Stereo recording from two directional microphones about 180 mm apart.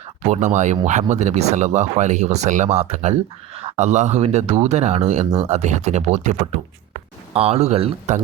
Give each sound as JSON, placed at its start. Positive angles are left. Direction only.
{"t": 0.3, "sound": "speech", "side_deg": -40}